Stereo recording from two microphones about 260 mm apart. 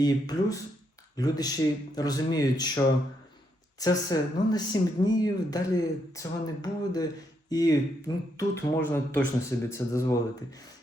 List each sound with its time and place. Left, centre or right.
0.0 s speech: centre